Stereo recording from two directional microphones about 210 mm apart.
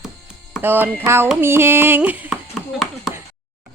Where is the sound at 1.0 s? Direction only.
10° right (ahead or behind).